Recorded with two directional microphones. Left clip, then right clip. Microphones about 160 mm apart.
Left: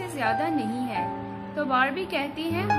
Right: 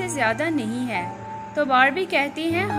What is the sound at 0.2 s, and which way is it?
A woman's voice, 25° right (ahead or behind).